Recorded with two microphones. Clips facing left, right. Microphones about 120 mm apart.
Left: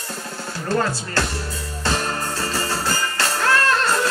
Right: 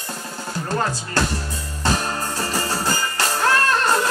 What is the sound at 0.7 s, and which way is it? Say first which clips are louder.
Speech: left 3 dB; 15° right (ahead or behind).